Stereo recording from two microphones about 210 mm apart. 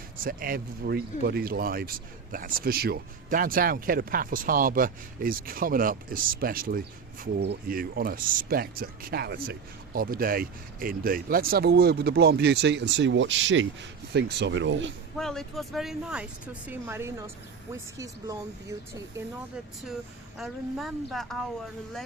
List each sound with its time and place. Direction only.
0.3 s speech: 40° right (ahead or behind); by 14.9 s 60° right (ahead or behind)
15.1 s speech: centre (ahead or behind); by 18.3 s 15° right (ahead or behind)
20.4 s speech: centre (ahead or behind)